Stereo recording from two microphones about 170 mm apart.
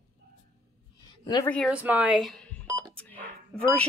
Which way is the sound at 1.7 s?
10° right (ahead or behind).